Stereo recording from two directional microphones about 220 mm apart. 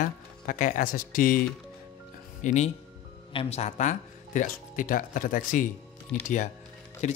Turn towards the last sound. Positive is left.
turn(degrees=30)  # may be behind; listen again after turning